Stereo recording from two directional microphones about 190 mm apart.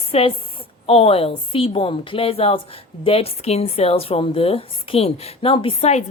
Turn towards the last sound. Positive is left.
turn(degrees=35)  # may be behind; listen again after turning